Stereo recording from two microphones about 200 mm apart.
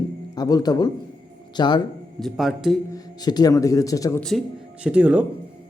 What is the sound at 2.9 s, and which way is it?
Speech, 20° left (ahead or behind).